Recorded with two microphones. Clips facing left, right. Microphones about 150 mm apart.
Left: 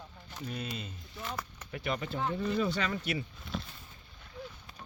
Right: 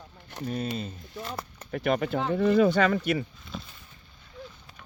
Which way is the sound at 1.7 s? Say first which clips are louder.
Right 10 dB; 50° right (ahead or behind).